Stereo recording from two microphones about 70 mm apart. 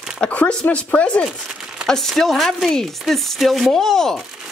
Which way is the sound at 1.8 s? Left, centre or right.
Centre.